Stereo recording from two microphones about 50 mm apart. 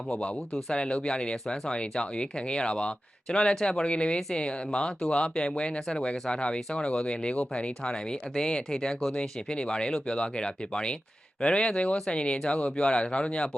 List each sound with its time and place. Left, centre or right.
0.7 s speech: centre